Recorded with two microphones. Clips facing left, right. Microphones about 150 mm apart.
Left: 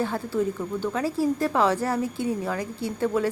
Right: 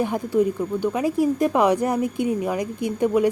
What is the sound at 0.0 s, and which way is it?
A woman's voice, 15° right (ahead or behind).